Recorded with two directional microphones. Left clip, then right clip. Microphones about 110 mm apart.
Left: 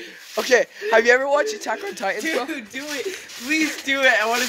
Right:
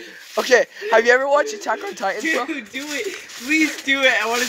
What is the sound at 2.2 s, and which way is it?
Speech, 45° left (ahead or behind).